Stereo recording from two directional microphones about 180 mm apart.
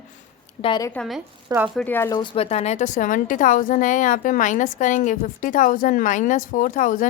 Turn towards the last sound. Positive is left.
turn(degrees=45)  # may be behind; listen again after turning